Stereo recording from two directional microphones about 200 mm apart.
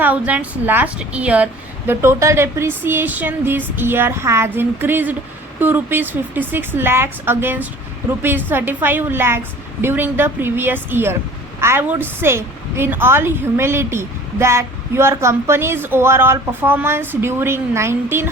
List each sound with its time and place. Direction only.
0.0 s a woman's voice: 10° right (ahead or behind)